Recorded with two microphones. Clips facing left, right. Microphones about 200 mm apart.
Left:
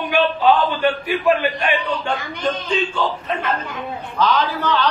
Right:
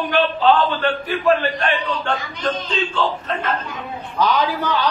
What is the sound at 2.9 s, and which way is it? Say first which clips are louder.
Speech: even; 10° left (ahead or behind).